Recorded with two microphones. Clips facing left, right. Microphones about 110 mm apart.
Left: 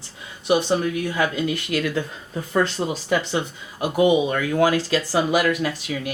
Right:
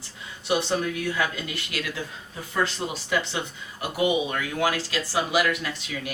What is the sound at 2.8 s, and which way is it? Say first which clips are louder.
Speech: left 6 dB; 30° left (ahead or behind).